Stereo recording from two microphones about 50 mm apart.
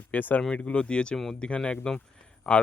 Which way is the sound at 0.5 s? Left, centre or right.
Left.